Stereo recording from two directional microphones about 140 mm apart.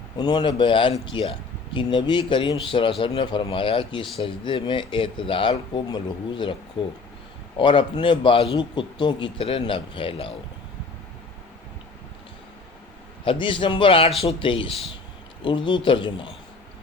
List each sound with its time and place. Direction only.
0.2 s a man's voice: 30° left (ahead or behind)
7.6 s a man's voice: 35° left (ahead or behind)
13.2 s a man's voice: 35° left (ahead or behind)